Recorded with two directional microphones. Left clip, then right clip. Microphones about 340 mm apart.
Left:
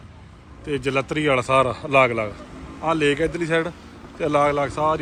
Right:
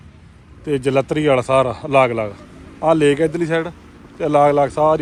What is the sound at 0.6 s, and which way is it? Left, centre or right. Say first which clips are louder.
Speech: right 6 dB; centre.